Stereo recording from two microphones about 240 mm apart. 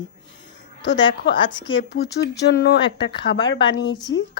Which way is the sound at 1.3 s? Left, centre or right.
Left.